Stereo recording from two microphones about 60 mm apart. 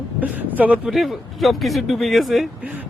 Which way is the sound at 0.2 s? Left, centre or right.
Right.